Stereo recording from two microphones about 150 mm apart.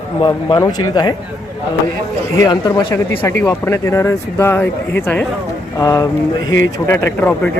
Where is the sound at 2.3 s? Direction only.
30° left (ahead or behind).